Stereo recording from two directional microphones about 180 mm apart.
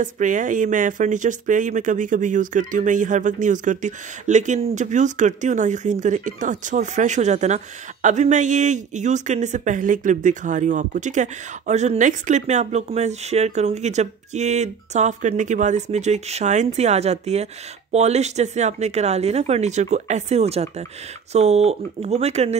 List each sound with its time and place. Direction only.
0.0 s speech: 45° right (ahead or behind)